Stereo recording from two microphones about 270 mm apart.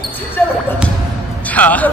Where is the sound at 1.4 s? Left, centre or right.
Centre.